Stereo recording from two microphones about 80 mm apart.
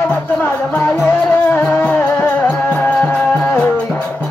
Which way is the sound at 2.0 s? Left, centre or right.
Left.